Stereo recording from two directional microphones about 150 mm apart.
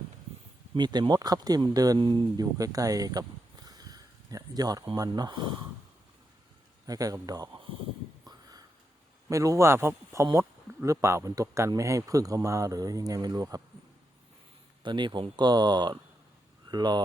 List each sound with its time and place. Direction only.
0.7 s speech: 30° right (ahead or behind)
6.8 s speech: 25° right (ahead or behind)
8.2 s a sound: 25° right (ahead or behind)
9.3 s speech: 20° right (ahead or behind)
14.8 s speech: 30° right (ahead or behind)